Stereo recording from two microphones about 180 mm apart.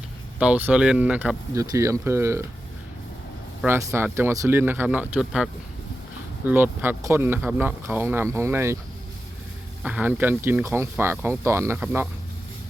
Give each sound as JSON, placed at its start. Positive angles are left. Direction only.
{"t": 0.3, "sound": "speech", "side_deg": -5}
{"t": 1.5, "sound": "speech", "side_deg": -15}
{"t": 3.6, "sound": "speech", "side_deg": -10}
{"t": 9.8, "sound": "speech", "side_deg": -10}